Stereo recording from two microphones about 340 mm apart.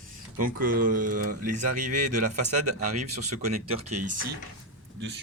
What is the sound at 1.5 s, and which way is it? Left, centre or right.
Speech, right.